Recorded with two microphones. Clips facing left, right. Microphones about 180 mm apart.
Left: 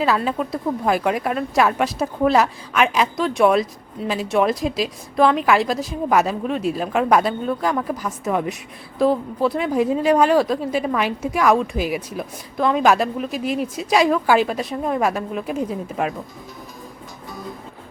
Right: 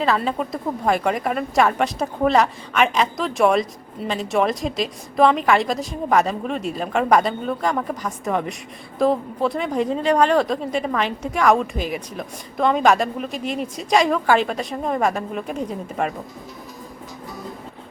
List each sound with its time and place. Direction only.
0.0 s a woman's voice: 5° left (ahead or behind)